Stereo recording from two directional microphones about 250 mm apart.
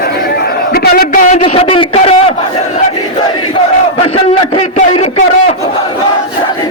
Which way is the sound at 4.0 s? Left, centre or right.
Left.